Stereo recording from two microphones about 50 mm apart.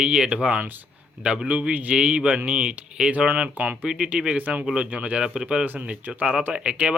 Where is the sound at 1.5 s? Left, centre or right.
Right.